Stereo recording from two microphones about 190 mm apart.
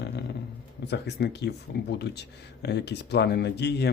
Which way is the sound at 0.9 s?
60° left (ahead or behind).